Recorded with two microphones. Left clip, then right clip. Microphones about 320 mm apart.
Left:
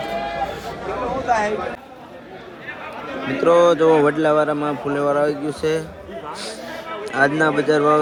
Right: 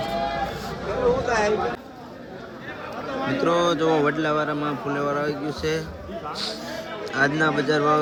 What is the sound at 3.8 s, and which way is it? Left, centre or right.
Speech, left.